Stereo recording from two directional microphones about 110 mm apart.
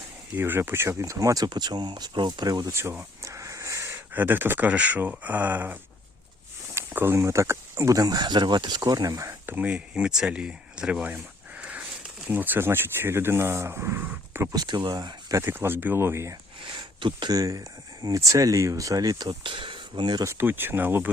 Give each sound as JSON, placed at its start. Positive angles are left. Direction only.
{"t": 0.3, "sound": "speech", "side_deg": -20}
{"t": 2.7, "sound": "speech", "side_deg": -25}
{"t": 3.2, "sound": "a sound", "side_deg": -30}
{"t": 4.1, "sound": "speech", "side_deg": -15}
{"t": 9.5, "sound": "speech", "side_deg": -15}
{"t": 11.1, "sound": "a sound", "side_deg": -15}
{"t": 12.3, "sound": "speech", "side_deg": -15}
{"t": 14.6, "sound": "speech", "side_deg": -45}
{"t": 16.6, "sound": "speech", "side_deg": -50}
{"t": 19.3, "sound": "speech", "side_deg": -50}
{"t": 20.2, "sound": "speech", "side_deg": -20}